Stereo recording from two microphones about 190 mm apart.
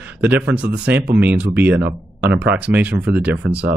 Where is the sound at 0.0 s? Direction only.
10° right (ahead or behind).